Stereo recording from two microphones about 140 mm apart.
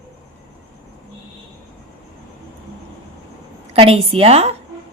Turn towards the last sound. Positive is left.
turn(degrees=-45)  # may be behind; listen again after turning